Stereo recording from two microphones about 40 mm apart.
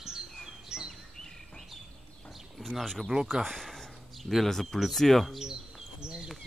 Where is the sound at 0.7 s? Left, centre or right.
Centre.